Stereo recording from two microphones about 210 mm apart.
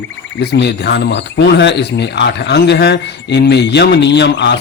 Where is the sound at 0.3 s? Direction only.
55° left (ahead or behind).